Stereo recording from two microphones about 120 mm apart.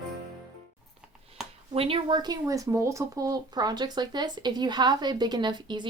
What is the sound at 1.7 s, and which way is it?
Speech, 50° right (ahead or behind).